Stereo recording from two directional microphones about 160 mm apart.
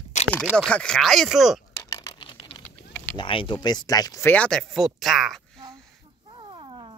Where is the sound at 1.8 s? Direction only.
20° left (ahead or behind).